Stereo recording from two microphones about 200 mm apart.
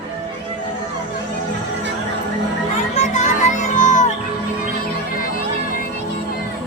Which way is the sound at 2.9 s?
35° left (ahead or behind).